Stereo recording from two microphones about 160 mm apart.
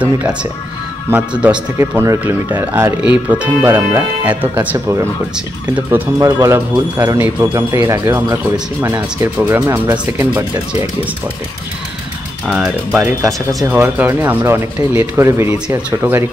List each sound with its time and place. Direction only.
0.0 s speech: 5° right (ahead or behind)
7.1 s speech: 10° right (ahead or behind)
12.4 s speech: 10° right (ahead or behind)